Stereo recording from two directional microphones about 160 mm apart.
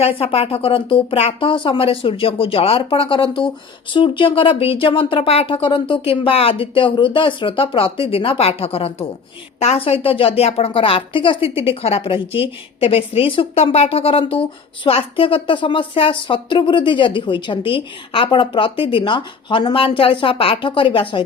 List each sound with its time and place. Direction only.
0.0 s speech: 35° left (ahead or behind)